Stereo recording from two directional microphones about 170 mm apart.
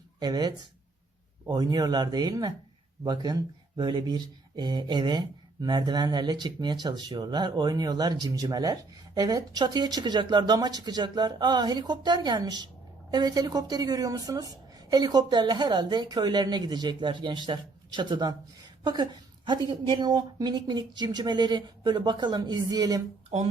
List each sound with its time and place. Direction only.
0.2 s a woman's voice: 25° right (ahead or behind)
23.3 s speech: 40° right (ahead or behind)